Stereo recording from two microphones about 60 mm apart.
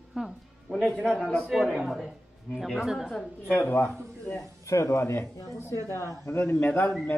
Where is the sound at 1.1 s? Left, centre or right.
Centre.